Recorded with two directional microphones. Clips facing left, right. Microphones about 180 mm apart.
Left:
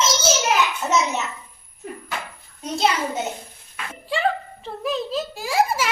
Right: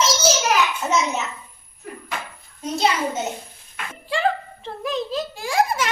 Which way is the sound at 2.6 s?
Centre (ahead or behind).